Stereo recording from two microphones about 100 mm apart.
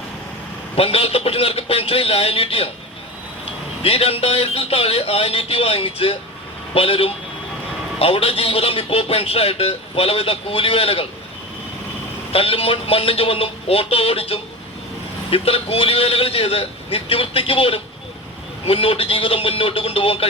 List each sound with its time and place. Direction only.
0.8 s speech: 75° left (ahead or behind)
3.8 s speech: 75° left (ahead or behind)
12.3 s speech: 70° left (ahead or behind)